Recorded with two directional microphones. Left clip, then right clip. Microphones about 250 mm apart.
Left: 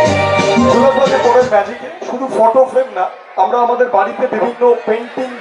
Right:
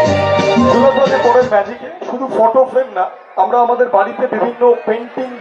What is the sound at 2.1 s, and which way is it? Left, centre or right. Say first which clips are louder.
A man's voice: left 1 dB; centre.